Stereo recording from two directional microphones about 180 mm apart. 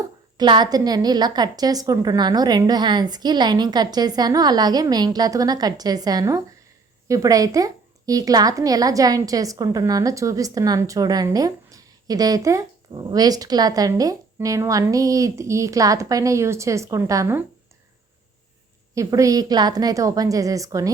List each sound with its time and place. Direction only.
0.3 s a woman's voice: 25° right (ahead or behind)
18.9 s a woman's voice: 20° right (ahead or behind)